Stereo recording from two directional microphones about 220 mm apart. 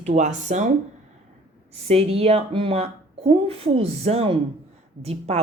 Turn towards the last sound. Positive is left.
turn(degrees=-30)  # may be behind; listen again after turning